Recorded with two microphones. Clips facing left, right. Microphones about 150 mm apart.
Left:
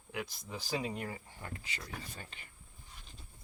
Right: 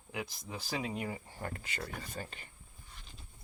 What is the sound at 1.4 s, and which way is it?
Speech, 50° right (ahead or behind).